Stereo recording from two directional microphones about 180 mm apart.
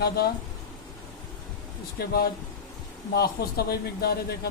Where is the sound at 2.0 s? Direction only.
60° left (ahead or behind).